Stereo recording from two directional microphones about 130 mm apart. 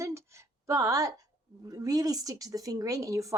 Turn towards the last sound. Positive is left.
turn(degrees=-25)  # may be behind; listen again after turning